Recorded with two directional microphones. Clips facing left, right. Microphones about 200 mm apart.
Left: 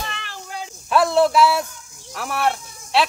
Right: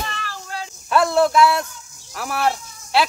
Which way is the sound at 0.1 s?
20° left (ahead or behind).